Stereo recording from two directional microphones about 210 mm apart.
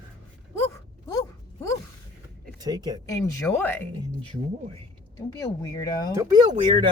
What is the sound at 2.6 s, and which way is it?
Speech, 20° right (ahead or behind).